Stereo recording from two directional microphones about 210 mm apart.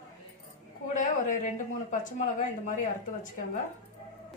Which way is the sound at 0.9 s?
35° left (ahead or behind).